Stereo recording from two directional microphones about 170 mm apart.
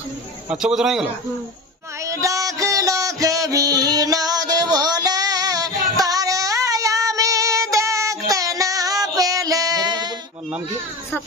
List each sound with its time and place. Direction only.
0.5 s a man's voice: 5° right (ahead or behind)
2.0 s music: 20° right (ahead or behind)